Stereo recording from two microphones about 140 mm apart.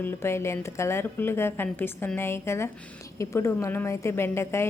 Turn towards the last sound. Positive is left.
turn(degrees=20)  # may be behind; listen again after turning